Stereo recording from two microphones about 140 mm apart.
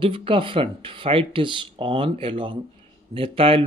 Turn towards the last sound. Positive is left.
turn(degrees=-40)  # may be behind; listen again after turning